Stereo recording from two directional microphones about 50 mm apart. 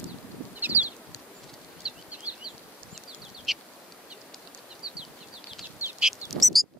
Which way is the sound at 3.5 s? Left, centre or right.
Centre.